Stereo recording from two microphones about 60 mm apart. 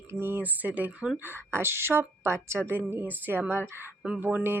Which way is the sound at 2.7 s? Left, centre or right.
Right.